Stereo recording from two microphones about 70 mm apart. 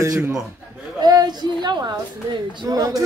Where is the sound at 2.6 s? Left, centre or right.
Right.